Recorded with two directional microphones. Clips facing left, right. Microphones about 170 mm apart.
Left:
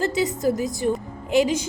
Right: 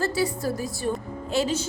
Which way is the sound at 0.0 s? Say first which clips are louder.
Left 4 dB; 20° left (ahead or behind).